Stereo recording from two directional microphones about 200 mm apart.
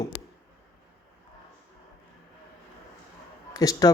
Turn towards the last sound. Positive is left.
turn(degrees=15)  # may be behind; listen again after turning